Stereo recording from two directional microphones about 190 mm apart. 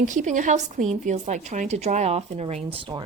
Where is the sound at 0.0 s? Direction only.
40° right (ahead or behind).